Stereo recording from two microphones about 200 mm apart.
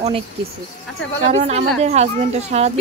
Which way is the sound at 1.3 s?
35° right (ahead or behind).